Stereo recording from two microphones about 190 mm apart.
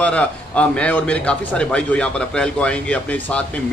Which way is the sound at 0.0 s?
5° left (ahead or behind).